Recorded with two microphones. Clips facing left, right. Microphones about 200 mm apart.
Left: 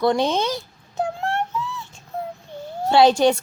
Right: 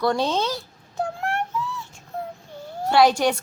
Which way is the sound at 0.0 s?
20° left (ahead or behind).